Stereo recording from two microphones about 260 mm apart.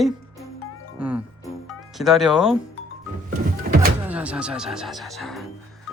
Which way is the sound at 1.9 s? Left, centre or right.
Centre.